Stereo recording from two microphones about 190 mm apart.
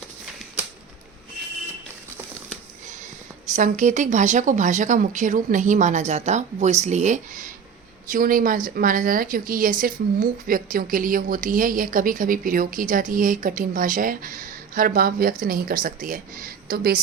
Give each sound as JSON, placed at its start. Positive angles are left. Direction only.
{"t": 3.5, "sound": "a woman's voice", "side_deg": -40}